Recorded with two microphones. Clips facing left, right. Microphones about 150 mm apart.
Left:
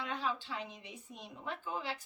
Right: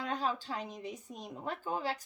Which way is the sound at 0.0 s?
40° right (ahead or behind).